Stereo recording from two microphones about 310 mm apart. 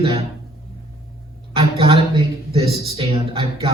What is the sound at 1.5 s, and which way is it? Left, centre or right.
A woman's voice, centre.